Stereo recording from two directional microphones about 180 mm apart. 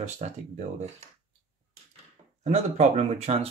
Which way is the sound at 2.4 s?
40° right (ahead or behind).